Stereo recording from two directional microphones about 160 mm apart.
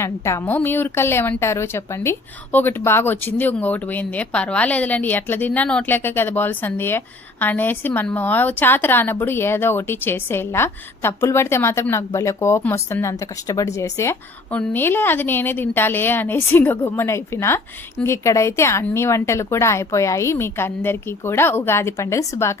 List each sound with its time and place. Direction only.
0.0 s speech: 15° left (ahead or behind)